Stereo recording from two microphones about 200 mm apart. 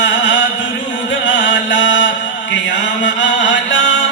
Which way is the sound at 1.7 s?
65° left (ahead or behind).